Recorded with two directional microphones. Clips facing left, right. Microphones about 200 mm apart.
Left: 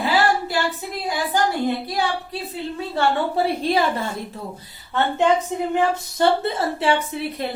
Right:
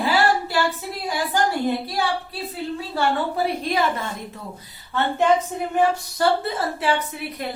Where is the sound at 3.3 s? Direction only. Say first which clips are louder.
Left 3 dB; 30° left (ahead or behind).